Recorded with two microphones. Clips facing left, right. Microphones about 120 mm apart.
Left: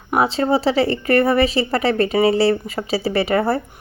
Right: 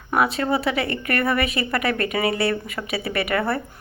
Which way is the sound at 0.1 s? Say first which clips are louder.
Left 4 dB; 25° left (ahead or behind).